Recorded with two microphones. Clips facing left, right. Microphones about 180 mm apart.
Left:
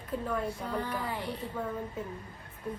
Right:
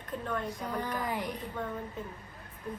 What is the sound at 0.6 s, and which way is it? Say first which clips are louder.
Speech: even; 10° right (ahead or behind).